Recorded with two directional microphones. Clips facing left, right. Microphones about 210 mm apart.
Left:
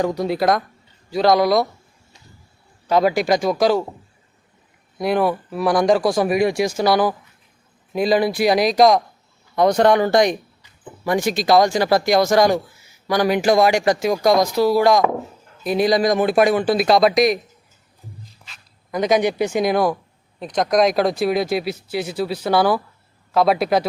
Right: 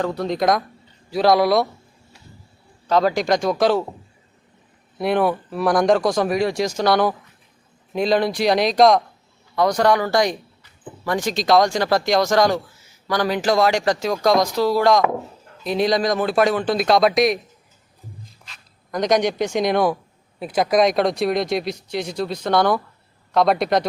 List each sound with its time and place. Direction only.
0.0 s speech: 10° left (ahead or behind)
2.8 s speech: 10° left (ahead or behind)
4.9 s speech: centre (ahead or behind)
9.6 s speech: 25° left (ahead or behind); by 17.4 s centre (ahead or behind)
18.4 s speech: centre (ahead or behind)